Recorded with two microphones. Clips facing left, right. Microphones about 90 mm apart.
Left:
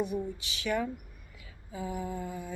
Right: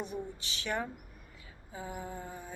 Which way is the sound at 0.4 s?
35° right (ahead or behind).